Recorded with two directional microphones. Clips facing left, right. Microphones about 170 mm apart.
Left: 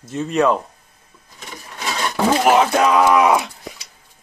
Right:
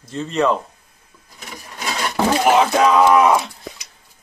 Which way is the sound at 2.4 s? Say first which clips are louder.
Right 1 dB; 5° left (ahead or behind).